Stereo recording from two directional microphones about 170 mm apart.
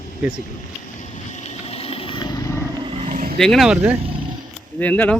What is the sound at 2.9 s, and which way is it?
Vehicle, 45° right (ahead or behind).